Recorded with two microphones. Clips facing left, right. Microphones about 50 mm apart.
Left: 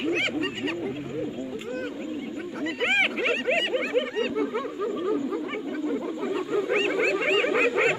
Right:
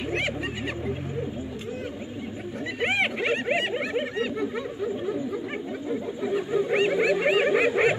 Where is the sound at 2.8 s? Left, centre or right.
Left.